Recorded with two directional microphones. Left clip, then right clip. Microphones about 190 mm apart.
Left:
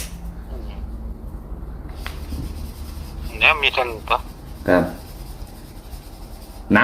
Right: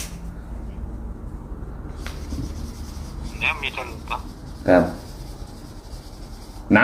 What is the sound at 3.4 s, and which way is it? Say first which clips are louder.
Radio: left 9 dB; 45° left (ahead or behind).